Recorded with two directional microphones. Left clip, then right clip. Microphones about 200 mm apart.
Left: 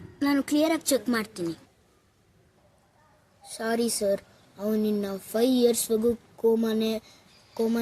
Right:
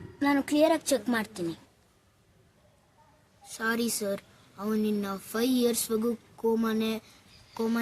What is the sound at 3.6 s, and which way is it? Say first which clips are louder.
Speech: left 2 dB; 5° right (ahead or behind).